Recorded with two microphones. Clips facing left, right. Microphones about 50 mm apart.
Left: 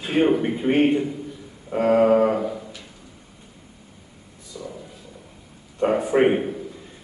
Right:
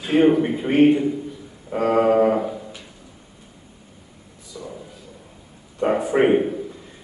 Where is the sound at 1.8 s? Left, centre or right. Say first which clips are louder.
Left 1 dB; right.